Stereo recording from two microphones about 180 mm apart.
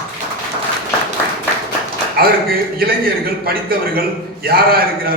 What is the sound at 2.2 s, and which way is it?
A man's voice, 55° right (ahead or behind).